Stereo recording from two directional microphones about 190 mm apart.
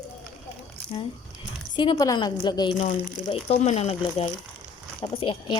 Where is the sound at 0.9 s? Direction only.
30° left (ahead or behind).